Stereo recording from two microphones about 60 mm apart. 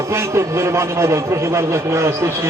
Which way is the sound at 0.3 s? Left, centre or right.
Right.